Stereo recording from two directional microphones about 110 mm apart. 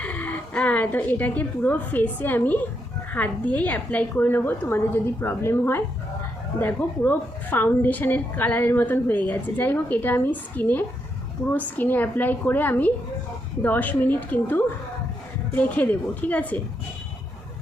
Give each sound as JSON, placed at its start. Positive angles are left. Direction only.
{"t": 0.0, "sound": "a woman's voice", "side_deg": 15}